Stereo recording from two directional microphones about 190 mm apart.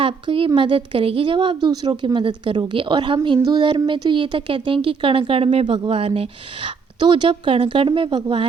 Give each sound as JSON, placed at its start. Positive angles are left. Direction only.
{"t": 0.0, "sound": "a woman's voice", "side_deg": -30}